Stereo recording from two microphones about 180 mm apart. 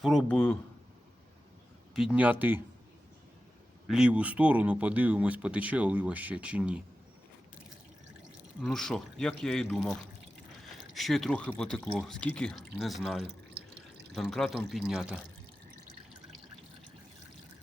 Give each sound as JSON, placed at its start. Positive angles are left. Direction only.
{"t": 0.0, "sound": "speech", "side_deg": 0}
{"t": 2.0, "sound": "speech", "side_deg": -5}
{"t": 3.8, "sound": "speech", "side_deg": -5}
{"t": 8.6, "sound": "speech", "side_deg": 5}
{"t": 13.2, "sound": "drip", "side_deg": -65}
{"t": 14.1, "sound": "speech", "side_deg": 0}